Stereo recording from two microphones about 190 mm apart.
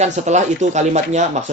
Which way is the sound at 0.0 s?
35° right (ahead or behind).